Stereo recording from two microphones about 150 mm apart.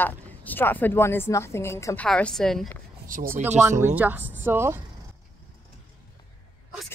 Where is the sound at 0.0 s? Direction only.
10° left (ahead or behind).